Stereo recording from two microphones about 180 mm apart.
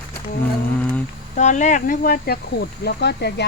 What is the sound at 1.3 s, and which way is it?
Speech, 40° left (ahead or behind).